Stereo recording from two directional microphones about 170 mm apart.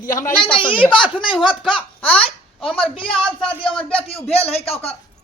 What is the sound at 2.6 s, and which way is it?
Speech, 5° left (ahead or behind).